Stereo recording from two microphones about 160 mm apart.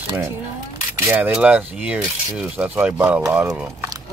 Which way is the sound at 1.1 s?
10° right (ahead or behind).